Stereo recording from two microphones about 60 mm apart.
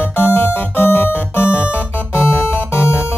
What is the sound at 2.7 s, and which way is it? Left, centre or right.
Music, left.